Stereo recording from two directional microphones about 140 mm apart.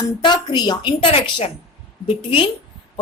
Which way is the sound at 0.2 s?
30° left (ahead or behind).